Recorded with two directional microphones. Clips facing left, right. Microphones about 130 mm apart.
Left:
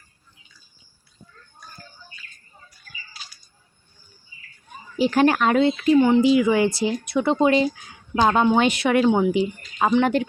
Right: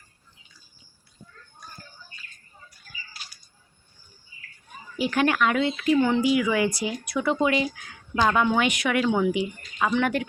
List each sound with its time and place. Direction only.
4.9 s speech: 30° left (ahead or behind)
6.0 s speech: 20° left (ahead or behind)